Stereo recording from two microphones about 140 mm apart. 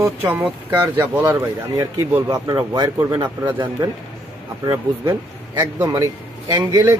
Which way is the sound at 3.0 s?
15° right (ahead or behind).